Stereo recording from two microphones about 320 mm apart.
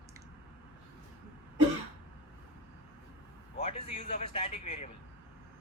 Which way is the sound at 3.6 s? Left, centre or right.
Centre.